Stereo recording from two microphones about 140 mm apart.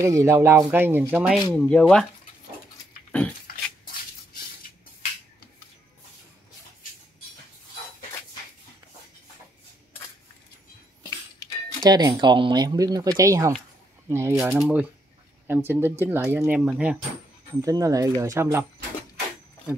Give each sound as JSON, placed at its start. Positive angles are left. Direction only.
{"t": 0.0, "sound": "speech", "side_deg": -20}
{"t": 1.5, "sound": "speech", "side_deg": 5}
{"t": 3.1, "sound": "dog", "side_deg": 10}
{"t": 11.0, "sound": "a sound", "side_deg": 25}
{"t": 11.8, "sound": "speech", "side_deg": -30}
{"t": 14.5, "sound": "speech", "side_deg": -10}
{"t": 17.6, "sound": "speech", "side_deg": -25}